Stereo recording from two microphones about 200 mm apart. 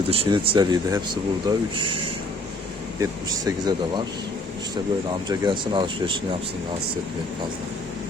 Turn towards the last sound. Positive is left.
turn(degrees=-25)  # may be behind; listen again after turning